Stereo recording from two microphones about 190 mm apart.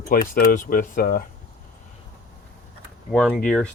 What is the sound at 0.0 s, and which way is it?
Speech, 50° left (ahead or behind).